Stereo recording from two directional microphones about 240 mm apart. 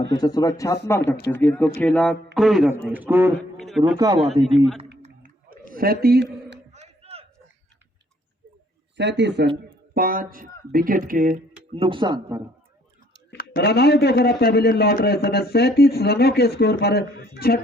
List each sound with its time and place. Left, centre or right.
0.1 s a man's voice: centre
3.9 s a man's voice: centre
4.5 s speech: centre
5.0 s a sound: right
5.7 s a man's voice: right
6.7 s a sound: right
9.0 s speech: right
11.7 s speech: right
13.3 s speech: left